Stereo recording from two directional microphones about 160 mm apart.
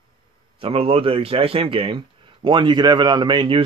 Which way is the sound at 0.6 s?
35° right (ahead or behind).